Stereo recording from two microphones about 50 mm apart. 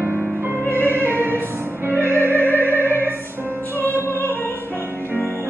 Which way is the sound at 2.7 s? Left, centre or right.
Left.